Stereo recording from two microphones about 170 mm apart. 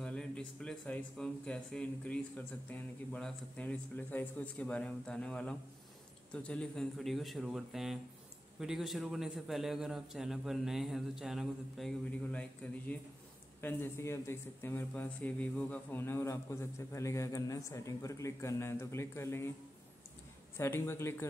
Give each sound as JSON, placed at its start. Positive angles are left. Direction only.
{"t": 0.0, "sound": "speech", "side_deg": 5}
{"t": 12.3, "sound": "speech", "side_deg": 10}
{"t": 20.5, "sound": "speech", "side_deg": 15}